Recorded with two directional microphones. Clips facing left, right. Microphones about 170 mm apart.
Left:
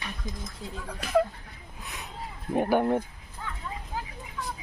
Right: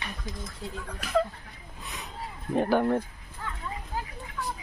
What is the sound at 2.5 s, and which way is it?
Speech, 15° left (ahead or behind).